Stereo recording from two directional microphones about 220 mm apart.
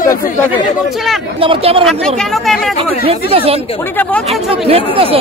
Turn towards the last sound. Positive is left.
turn(degrees=-25)  # may be behind; listen again after turning